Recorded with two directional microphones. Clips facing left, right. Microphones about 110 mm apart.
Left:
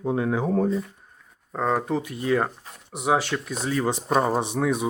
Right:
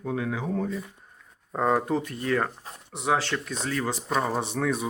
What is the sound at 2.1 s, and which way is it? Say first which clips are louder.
Speech: left 3 dB; 15° left (ahead or behind).